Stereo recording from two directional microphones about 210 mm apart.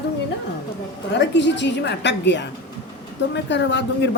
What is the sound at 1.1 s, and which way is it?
A woman's voice, 55° left (ahead or behind).